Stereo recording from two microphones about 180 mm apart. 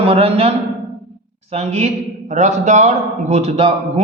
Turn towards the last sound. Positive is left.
turn(degrees=-35)  # may be behind; listen again after turning